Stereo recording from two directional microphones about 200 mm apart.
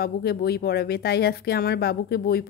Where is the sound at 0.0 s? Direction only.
50° left (ahead or behind).